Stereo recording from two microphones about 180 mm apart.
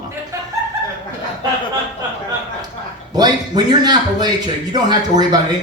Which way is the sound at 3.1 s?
20° right (ahead or behind).